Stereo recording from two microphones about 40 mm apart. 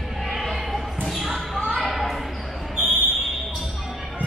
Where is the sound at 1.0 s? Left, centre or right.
Centre.